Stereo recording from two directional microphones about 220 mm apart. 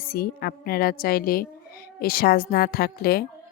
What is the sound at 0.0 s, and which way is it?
Speech, 45° left (ahead or behind).